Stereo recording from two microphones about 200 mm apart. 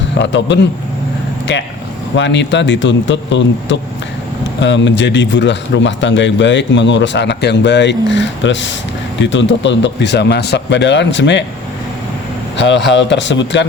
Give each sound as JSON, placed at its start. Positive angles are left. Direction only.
{"t": 0.2, "sound": "a man's voice", "side_deg": 65}
{"t": 2.1, "sound": "a man's voice", "side_deg": 65}
{"t": 12.5, "sound": "a man's voice", "side_deg": 60}